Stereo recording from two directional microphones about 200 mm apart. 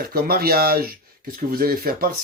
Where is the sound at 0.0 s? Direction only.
50° right (ahead or behind).